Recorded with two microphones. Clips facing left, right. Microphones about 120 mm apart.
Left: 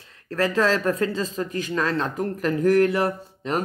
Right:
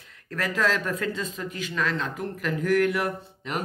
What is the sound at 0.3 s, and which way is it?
Speech, 35° left (ahead or behind).